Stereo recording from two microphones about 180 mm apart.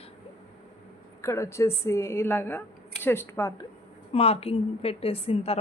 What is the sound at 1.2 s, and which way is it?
Speech, 15° left (ahead or behind).